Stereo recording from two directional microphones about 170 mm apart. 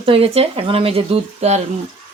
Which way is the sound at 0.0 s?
35° right (ahead or behind).